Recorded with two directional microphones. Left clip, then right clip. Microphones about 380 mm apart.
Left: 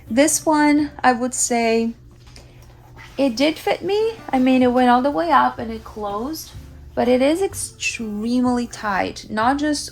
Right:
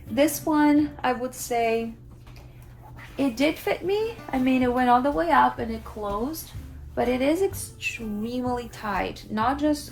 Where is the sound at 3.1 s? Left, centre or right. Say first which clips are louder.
Left 6 dB; left.